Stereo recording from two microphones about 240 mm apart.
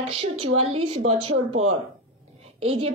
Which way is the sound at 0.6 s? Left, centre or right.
Right.